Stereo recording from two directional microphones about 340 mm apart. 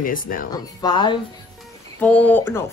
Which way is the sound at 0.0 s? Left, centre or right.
Left.